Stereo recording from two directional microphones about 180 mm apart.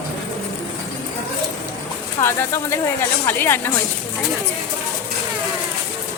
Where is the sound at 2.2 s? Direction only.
15° left (ahead or behind).